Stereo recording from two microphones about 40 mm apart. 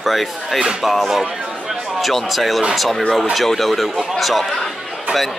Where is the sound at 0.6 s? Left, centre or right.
Right.